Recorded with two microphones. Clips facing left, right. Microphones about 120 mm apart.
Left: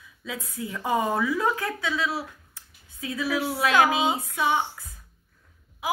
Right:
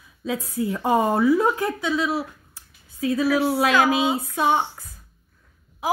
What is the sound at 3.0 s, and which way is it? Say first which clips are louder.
A woman's voice: right 7 dB; 45° right (ahead or behind).